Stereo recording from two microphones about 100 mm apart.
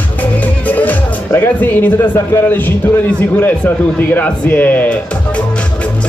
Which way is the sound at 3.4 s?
15° left (ahead or behind).